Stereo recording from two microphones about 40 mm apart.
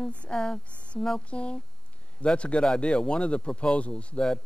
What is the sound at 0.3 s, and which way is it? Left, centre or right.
Speech, left.